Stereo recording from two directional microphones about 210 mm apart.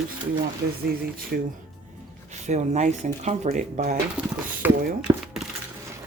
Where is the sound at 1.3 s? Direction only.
45° right (ahead or behind).